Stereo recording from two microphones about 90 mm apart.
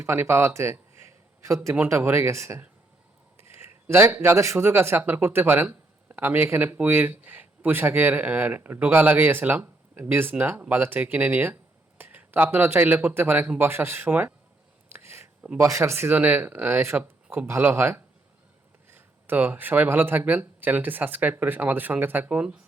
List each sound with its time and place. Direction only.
0.1 s speech: 30° right (ahead or behind)
2.0 s speech: 30° right (ahead or behind)
14.9 s a sound: 30° right (ahead or behind)
15.5 s speech: 35° right (ahead or behind)
15.8 s speech: 25° right (ahead or behind)